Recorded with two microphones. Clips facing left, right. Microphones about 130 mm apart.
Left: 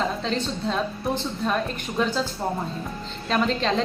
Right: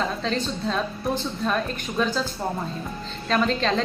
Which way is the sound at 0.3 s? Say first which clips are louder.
Even; 20° left (ahead or behind).